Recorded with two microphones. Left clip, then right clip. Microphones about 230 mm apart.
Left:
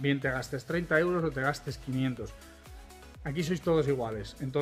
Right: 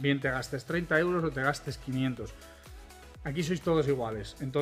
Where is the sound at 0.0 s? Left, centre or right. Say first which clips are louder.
Right 1 dB; centre.